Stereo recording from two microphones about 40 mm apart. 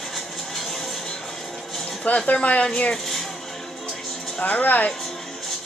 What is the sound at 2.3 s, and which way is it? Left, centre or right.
Speech, left.